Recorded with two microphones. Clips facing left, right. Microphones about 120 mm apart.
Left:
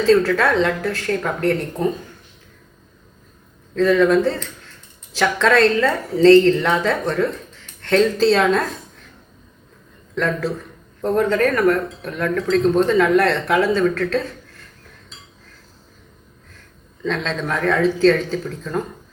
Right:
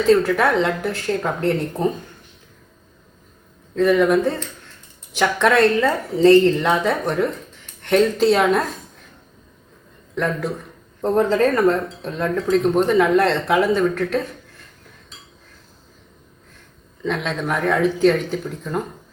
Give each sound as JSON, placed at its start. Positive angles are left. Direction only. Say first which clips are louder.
{"t": 0.0, "sound": "speech", "louder": "even", "side_deg": -20}
{"t": 3.8, "sound": "speech", "louder": "left 1 dB", "side_deg": -15}
{"t": 10.2, "sound": "speech", "louder": "left 1 dB", "side_deg": -15}
{"t": 17.0, "sound": "speech", "louder": "even", "side_deg": -15}